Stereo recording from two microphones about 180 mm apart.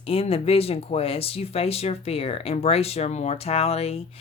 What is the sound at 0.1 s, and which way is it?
Speech, 30° left (ahead or behind).